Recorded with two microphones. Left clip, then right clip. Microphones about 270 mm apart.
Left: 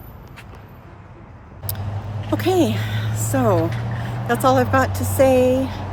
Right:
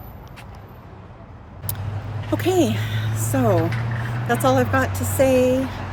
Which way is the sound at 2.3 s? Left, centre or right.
Centre.